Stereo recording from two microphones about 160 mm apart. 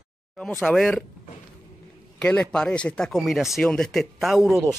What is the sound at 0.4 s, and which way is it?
Speech, 5° left (ahead or behind).